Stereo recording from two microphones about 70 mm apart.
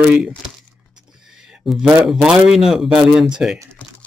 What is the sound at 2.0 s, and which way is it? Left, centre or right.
Speech, centre.